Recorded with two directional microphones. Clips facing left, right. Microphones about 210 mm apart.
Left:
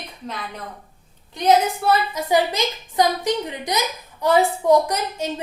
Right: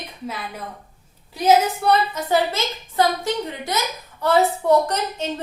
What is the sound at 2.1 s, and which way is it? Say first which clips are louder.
A woman's voice: left 1 dB; 15° left (ahead or behind).